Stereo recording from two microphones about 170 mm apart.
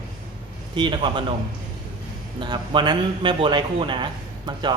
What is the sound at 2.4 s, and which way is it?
Speech, 25° right (ahead or behind).